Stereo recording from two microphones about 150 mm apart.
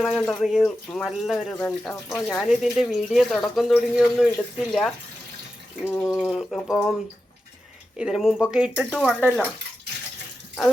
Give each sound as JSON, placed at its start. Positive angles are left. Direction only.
{"t": 0.0, "sound": "speech", "side_deg": 0}
{"t": 5.8, "sound": "a sound", "side_deg": 15}
{"t": 6.1, "sound": "speech", "side_deg": 0}
{"t": 7.9, "sound": "speech", "side_deg": -5}